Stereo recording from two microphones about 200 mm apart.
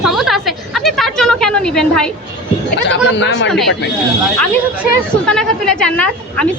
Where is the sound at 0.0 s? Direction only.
Centre (ahead or behind).